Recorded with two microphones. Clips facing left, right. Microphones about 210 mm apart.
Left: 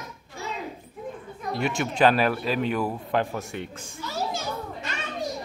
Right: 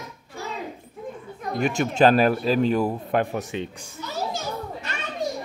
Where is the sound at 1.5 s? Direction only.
45° right (ahead or behind).